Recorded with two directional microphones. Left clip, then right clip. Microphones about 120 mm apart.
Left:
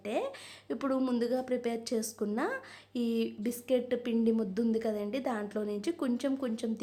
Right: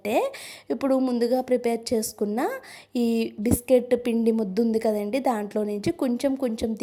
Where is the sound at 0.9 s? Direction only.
20° right (ahead or behind).